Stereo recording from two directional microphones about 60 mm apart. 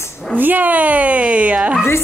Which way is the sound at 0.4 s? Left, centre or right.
Right.